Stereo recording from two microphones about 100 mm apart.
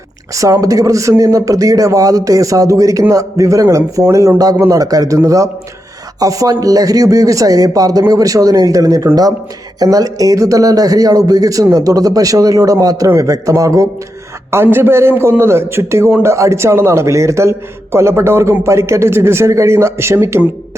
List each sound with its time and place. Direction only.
0.3 s speech: 35° right (ahead or behind)
14.5 s speech: 20° right (ahead or behind)